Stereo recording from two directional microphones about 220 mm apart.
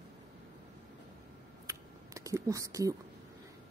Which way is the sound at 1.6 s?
15° right (ahead or behind).